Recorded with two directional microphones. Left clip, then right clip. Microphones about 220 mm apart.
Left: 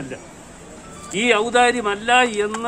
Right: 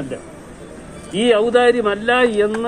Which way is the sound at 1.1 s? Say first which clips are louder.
Right 3 dB; 10° left (ahead or behind).